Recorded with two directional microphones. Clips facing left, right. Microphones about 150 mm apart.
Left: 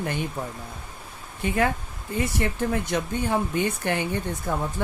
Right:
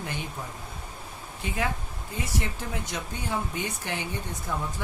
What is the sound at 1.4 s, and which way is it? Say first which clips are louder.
Speech: left 7 dB; 55° left (ahead or behind).